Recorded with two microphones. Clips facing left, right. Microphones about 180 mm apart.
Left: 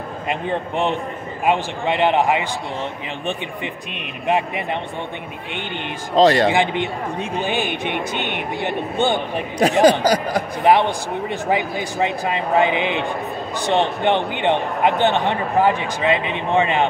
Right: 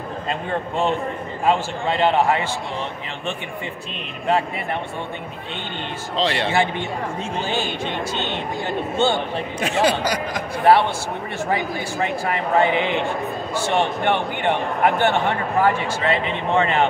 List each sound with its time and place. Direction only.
0.3 s a man's voice: 15° left (ahead or behind)
3.9 s a man's voice: 15° left (ahead or behind)
6.1 s speech: 40° left (ahead or behind)
6.5 s a man's voice: 15° left (ahead or behind)
9.8 s speech: 35° left (ahead or behind)
10.6 s a man's voice: 15° left (ahead or behind)